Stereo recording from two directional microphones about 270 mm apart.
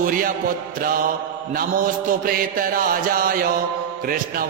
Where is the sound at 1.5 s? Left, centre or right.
Right.